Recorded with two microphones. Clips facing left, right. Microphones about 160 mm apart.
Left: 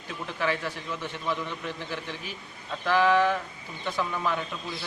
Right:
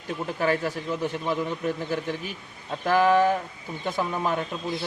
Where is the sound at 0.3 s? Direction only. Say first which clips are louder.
Right 4 dB; 40° right (ahead or behind).